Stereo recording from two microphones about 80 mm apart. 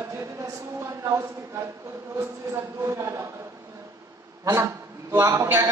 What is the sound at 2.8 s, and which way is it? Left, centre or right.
Speech, right.